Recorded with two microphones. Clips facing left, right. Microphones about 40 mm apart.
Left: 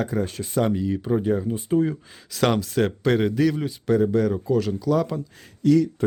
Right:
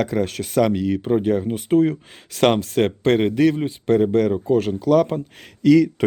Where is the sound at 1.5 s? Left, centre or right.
Right.